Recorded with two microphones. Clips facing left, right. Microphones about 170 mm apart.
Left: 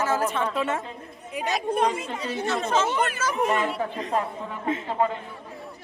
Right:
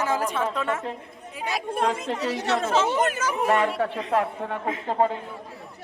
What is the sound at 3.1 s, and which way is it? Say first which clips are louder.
Speech: left 1 dB; 10° right (ahead or behind).